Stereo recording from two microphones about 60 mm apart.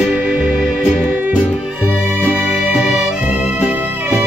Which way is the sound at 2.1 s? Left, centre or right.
Right.